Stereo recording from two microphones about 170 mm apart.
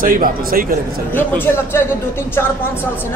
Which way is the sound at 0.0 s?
55° right (ahead or behind).